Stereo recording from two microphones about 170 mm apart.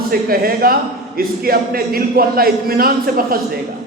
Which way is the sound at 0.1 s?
60° right (ahead or behind).